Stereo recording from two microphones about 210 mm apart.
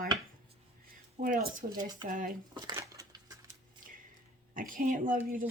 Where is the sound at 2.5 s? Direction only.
15° right (ahead or behind).